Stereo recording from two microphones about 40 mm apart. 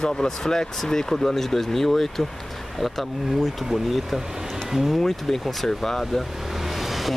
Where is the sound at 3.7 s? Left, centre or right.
Centre.